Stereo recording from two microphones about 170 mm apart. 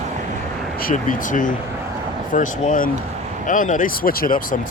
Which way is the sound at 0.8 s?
55° left (ahead or behind).